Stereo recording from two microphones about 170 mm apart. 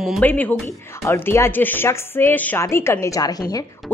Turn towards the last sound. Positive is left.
turn(degrees=20)  # may be behind; listen again after turning